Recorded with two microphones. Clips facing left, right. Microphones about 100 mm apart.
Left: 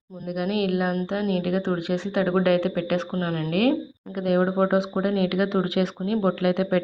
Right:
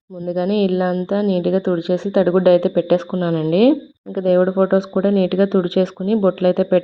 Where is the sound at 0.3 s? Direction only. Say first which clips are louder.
Right 7 dB; 25° right (ahead or behind).